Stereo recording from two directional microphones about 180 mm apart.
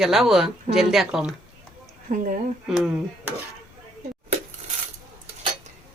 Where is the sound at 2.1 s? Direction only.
45° right (ahead or behind).